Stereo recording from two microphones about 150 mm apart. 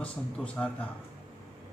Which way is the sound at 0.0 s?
5° left (ahead or behind).